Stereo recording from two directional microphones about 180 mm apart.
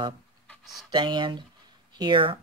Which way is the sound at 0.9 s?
25° right (ahead or behind).